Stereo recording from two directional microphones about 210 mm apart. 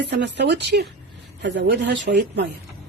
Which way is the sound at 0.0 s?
55° right (ahead or behind).